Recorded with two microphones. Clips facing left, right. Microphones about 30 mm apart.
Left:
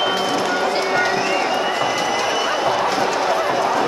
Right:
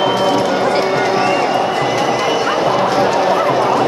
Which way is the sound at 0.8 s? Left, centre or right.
Centre.